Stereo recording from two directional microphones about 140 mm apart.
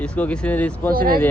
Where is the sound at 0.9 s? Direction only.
90° right.